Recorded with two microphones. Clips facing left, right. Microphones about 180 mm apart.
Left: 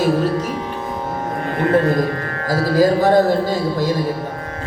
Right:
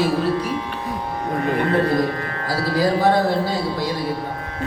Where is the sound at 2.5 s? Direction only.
45° left (ahead or behind).